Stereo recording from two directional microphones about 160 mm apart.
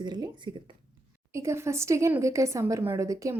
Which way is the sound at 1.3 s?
15° right (ahead or behind).